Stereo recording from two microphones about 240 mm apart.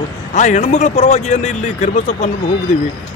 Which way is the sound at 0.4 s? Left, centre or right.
Left.